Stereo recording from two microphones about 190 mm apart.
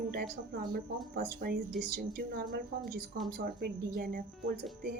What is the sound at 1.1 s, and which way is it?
A woman's voice, 55° right (ahead or behind).